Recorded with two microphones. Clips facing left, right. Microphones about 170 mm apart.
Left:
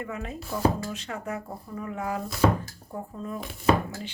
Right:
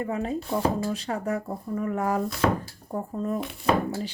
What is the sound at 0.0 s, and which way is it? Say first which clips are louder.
Speech: right 7 dB; 35° right (ahead or behind).